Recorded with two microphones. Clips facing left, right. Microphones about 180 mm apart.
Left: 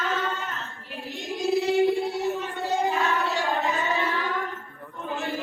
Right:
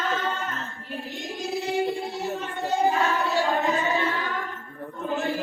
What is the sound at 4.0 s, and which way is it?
Music, centre (ahead or behind).